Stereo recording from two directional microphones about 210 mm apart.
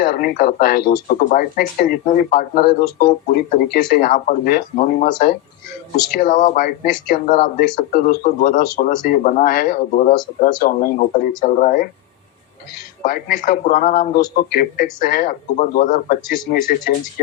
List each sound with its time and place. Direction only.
0.0 s speech: 40° left (ahead or behind)
13.0 s speech: 40° left (ahead or behind)